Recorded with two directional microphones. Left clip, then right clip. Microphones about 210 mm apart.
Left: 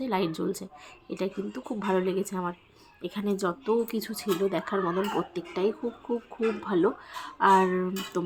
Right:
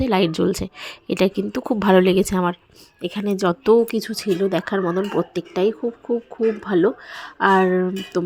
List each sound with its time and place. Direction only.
0.0 s speech: 35° right (ahead or behind)